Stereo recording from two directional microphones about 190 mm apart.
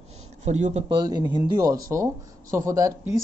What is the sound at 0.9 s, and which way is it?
Speech, 20° right (ahead or behind).